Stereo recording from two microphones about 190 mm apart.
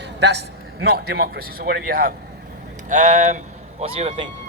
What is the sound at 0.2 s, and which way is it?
A man's voice, 60° right (ahead or behind).